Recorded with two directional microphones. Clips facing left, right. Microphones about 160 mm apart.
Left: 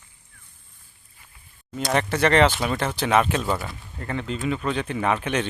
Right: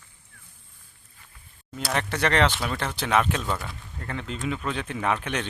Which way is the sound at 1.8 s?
Centre (ahead or behind).